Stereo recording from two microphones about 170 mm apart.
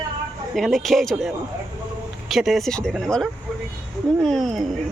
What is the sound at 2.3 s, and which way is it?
Speech, centre (ahead or behind).